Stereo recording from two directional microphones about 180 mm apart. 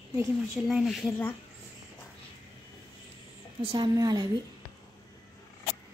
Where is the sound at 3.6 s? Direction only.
25° right (ahead or behind).